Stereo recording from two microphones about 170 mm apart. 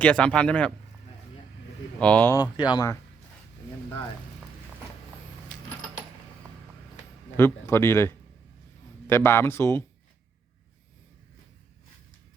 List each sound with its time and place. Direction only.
0.0 s speech: 5° left (ahead or behind)
2.0 s speech: 5° left (ahead or behind)
2.3 s speech: 25° left (ahead or behind)
7.3 s speech: 15° left (ahead or behind)